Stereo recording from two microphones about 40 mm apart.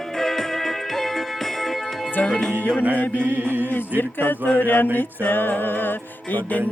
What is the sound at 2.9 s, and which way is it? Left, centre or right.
Music, left.